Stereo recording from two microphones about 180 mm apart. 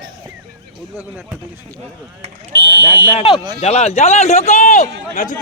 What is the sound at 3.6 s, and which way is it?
A man's voice, 35° left (ahead or behind).